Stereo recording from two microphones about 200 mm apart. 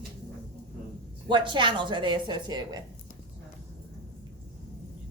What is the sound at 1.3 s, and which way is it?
A woman's voice, 25° right (ahead or behind).